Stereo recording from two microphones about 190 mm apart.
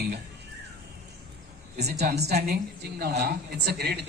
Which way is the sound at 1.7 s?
60° right (ahead or behind).